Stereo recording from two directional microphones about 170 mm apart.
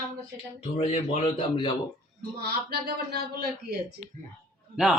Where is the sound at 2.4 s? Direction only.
65° right (ahead or behind).